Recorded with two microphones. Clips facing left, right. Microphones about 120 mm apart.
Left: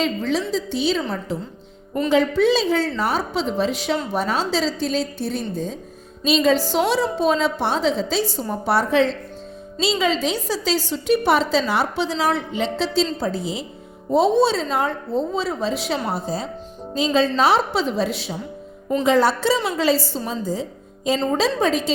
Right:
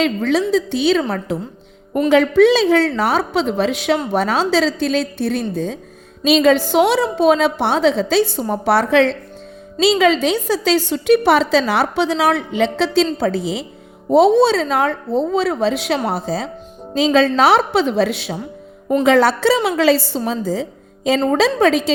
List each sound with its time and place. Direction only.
0.0 s a woman's voice: 70° right (ahead or behind); by 13.7 s 85° right
14.1 s a woman's voice: 75° right (ahead or behind); by 16.5 s 90° right
16.9 s a woman's voice: 75° right (ahead or behind)
21.2 s a woman's voice: 70° right (ahead or behind)